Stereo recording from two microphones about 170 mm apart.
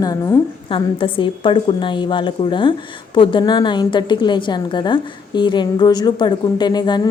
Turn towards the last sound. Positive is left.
turn(degrees=25)  # may be behind; listen again after turning